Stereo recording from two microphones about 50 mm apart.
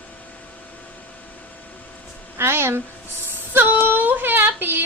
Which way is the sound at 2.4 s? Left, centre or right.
Right.